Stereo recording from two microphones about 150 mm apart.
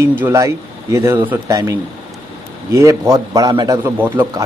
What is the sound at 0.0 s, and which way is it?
A man's voice, 15° right (ahead or behind).